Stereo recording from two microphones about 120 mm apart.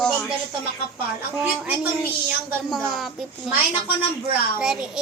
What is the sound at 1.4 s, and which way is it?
A woman's voice, 10° right (ahead or behind).